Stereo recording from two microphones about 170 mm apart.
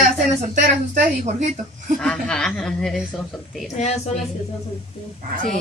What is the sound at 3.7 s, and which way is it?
Speech, 40° left (ahead or behind).